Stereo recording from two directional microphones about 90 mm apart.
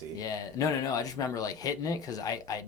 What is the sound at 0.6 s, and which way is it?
Speech, 40° left (ahead or behind).